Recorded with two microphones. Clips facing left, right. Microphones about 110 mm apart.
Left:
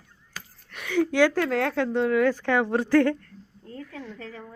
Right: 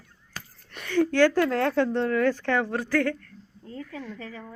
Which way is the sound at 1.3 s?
Centre (ahead or behind).